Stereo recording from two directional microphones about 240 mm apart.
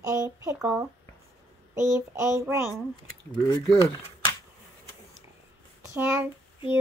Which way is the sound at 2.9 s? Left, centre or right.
Centre.